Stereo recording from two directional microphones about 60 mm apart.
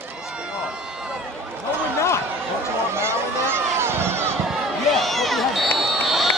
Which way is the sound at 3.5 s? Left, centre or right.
Right.